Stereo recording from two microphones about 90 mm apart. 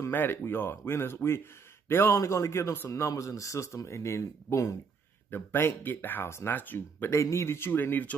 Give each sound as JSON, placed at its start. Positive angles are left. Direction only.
{"t": 0.1, "sound": "speech", "side_deg": 20}
{"t": 2.1, "sound": "a man's voice", "side_deg": 35}
{"t": 7.2, "sound": "speech", "side_deg": 35}